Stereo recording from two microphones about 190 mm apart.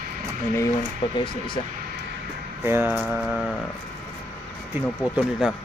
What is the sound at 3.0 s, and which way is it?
Speech, centre (ahead or behind).